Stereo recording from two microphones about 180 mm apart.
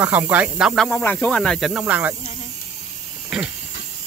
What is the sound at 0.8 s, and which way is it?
Speech, 10° left (ahead or behind).